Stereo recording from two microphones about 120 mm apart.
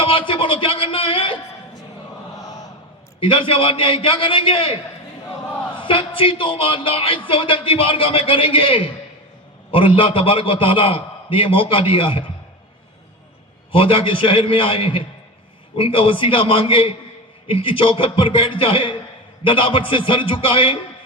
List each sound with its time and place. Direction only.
0.0 s a sound: 45° left (ahead or behind)
2.4 s chant: 30° left (ahead or behind)
3.2 s a man's voice: 45° left (ahead or behind)
13.7 s a man's voice: 45° left (ahead or behind)